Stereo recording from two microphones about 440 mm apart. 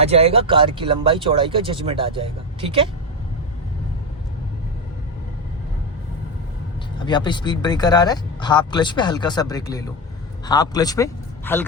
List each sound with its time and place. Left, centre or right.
0.0 s speech: centre
7.0 s a man's voice: centre